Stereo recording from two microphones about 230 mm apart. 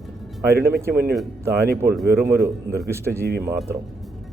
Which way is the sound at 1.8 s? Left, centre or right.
Centre.